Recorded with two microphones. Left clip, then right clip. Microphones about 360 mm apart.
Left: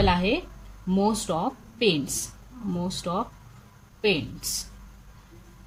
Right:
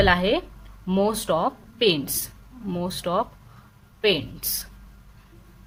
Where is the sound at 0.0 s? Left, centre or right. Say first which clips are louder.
Right 4 dB; centre.